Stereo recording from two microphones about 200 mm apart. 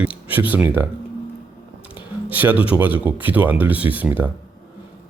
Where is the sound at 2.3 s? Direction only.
10° right (ahead or behind).